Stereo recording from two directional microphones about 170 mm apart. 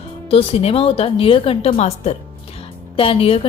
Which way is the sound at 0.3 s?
35° left (ahead or behind).